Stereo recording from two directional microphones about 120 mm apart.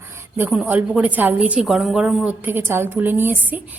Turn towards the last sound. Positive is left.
turn(degrees=-15)  # may be behind; listen again after turning